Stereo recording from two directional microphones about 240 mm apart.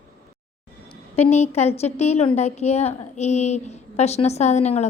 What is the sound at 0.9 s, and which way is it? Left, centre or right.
A woman's voice, left.